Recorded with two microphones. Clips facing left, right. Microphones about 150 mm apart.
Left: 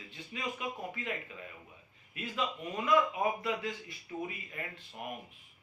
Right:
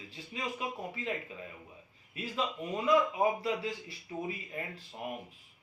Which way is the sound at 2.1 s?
35° right (ahead or behind).